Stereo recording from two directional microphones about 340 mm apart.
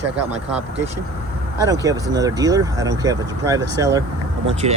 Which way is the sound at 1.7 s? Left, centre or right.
Centre.